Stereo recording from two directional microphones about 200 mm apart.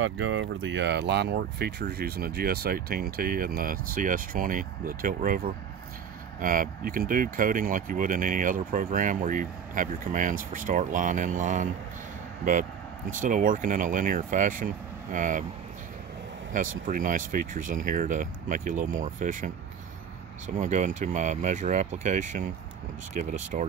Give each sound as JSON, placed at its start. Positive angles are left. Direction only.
{"t": 0.0, "sound": "speech", "side_deg": -75}
{"t": 13.2, "sound": "speech", "side_deg": -40}
{"t": 16.5, "sound": "speech", "side_deg": -40}